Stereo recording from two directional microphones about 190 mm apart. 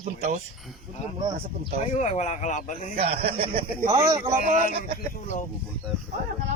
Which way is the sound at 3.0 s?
30° right (ahead or behind).